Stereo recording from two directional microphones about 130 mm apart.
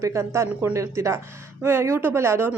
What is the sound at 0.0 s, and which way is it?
Speech, 20° right (ahead or behind).